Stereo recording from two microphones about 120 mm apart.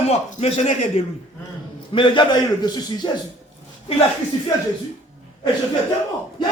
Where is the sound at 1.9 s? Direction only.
45° left (ahead or behind).